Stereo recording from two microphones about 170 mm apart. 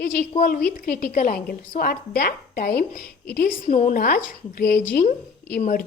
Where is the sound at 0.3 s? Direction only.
50° left (ahead or behind).